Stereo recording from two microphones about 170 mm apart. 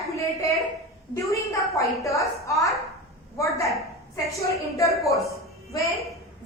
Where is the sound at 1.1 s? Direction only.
20° left (ahead or behind).